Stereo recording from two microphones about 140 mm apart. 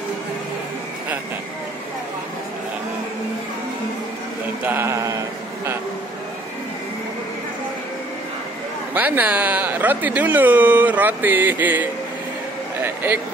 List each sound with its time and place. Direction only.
4.6 s sheep: 15° right (ahead or behind)
8.9 s speech: 10° right (ahead or behind)
12.8 s a sound: 15° right (ahead or behind)